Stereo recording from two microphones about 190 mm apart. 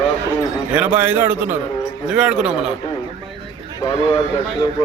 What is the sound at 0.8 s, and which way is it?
A man's voice, 10° right (ahead or behind).